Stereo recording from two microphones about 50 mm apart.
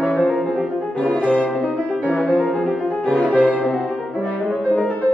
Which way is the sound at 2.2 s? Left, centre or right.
Right.